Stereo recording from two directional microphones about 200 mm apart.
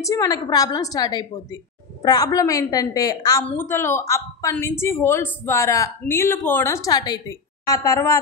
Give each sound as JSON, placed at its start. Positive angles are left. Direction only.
{"t": 0.0, "sound": "a woman's voice", "side_deg": 20}